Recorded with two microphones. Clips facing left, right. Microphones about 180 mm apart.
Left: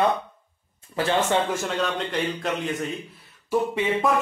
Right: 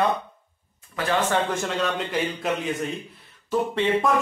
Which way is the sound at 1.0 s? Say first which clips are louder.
Left 1 dB; 25° left (ahead or behind).